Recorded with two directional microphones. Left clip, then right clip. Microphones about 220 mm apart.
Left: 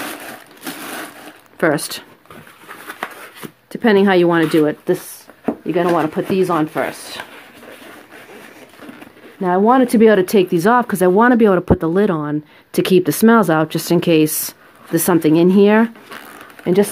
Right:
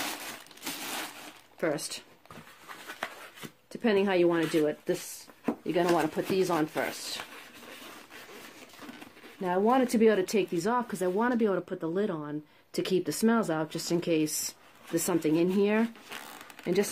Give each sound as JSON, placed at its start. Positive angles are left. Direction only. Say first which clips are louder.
{"t": 1.6, "sound": "speech", "louder": "left 14 dB", "side_deg": 40}
{"t": 3.7, "sound": "speech", "louder": "left 13 dB", "side_deg": 40}
{"t": 5.7, "sound": "speech", "louder": "left 10 dB", "side_deg": 25}
{"t": 9.4, "sound": "speech", "louder": "left 13 dB", "side_deg": 30}